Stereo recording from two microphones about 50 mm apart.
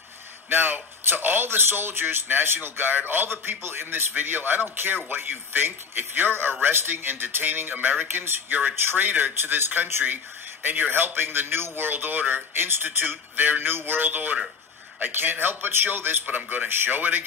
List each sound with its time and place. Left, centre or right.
0.5 s a man's voice: right